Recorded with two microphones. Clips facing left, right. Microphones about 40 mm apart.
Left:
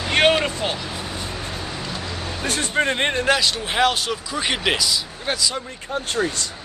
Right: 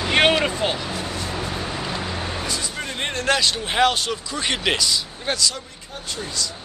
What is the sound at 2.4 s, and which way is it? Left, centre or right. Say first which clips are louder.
Vehicle: left 3 dB; left.